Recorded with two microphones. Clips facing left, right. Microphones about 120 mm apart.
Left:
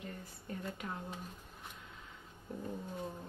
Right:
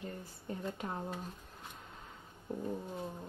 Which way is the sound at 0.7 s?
30° right (ahead or behind).